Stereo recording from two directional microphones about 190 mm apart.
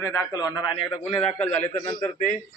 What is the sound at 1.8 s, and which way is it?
Speech, 40° left (ahead or behind).